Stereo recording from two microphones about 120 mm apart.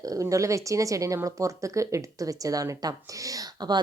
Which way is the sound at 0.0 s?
30° right (ahead or behind).